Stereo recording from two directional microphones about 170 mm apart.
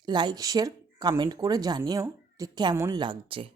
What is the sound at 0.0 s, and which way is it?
Speech, 25° right (ahead or behind).